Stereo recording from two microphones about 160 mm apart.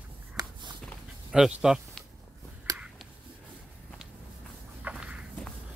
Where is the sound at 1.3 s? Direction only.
5° right (ahead or behind).